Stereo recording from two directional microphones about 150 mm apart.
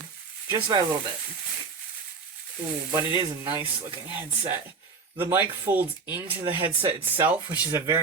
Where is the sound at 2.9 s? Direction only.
25° right (ahead or behind).